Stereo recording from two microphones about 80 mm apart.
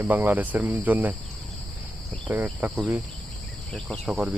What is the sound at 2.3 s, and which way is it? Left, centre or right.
Speech, right.